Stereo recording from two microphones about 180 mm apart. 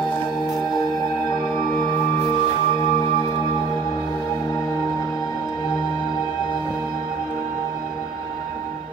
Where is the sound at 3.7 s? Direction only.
20° left (ahead or behind).